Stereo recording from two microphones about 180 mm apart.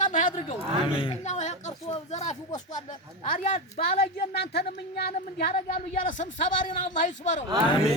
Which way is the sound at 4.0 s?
60° left (ahead or behind).